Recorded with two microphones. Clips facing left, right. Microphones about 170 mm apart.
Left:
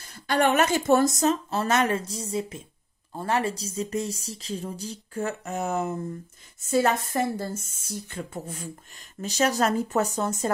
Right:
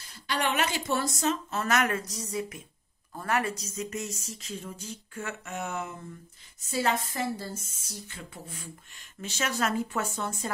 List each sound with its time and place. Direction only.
0.0 s speech: 50° left (ahead or behind)
7.0 s speech: 50° left (ahead or behind)